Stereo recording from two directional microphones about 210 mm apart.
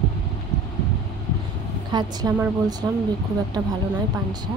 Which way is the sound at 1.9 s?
20° right (ahead or behind).